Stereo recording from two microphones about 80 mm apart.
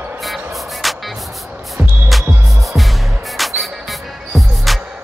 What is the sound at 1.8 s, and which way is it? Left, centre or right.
Music, centre.